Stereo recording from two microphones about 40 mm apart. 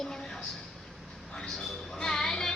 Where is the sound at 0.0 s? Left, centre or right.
Centre.